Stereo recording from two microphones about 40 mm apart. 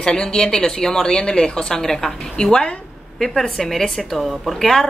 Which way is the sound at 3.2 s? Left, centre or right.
Centre.